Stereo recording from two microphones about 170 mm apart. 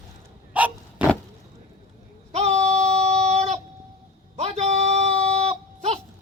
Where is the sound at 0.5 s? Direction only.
5° right (ahead or behind).